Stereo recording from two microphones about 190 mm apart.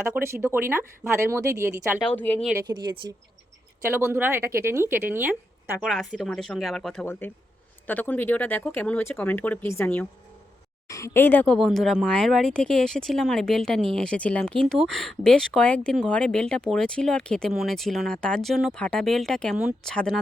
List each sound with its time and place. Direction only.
0.0 s speech: 15° right (ahead or behind)
2.0 s speech: 5° left (ahead or behind)
2.6 s speech: 25° right (ahead or behind)
3.8 s speech: 10° right (ahead or behind)
5.8 s speech: centre (ahead or behind)